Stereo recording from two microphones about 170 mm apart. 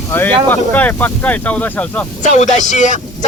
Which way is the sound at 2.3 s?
45° left (ahead or behind).